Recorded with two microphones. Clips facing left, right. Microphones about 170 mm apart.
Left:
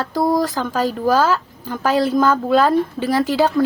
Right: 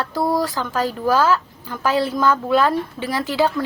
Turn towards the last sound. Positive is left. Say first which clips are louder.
# left 3 dB
turn(degrees=45)  # may be behind; listen again after turning